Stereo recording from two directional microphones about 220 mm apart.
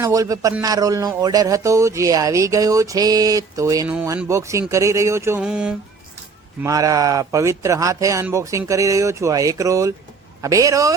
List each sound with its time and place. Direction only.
0.0 s a man's voice: 15° right (ahead or behind)
6.6 s a man's voice: 15° right (ahead or behind)